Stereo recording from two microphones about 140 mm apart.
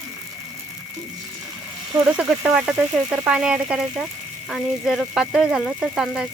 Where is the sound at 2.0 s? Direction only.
5° right (ahead or behind).